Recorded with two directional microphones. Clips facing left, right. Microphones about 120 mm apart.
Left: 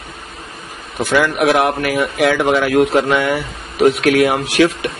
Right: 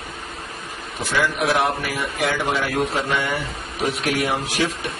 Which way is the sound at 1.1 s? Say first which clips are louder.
Left 7 dB; 65° left (ahead or behind).